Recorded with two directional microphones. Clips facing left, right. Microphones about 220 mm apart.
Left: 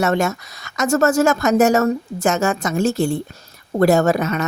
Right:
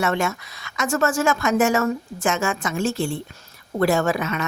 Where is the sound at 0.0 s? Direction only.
40° left (ahead or behind).